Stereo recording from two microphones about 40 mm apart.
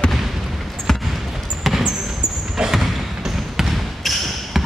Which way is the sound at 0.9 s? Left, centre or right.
Centre.